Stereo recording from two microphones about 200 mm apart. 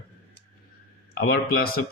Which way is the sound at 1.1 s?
50° left (ahead or behind).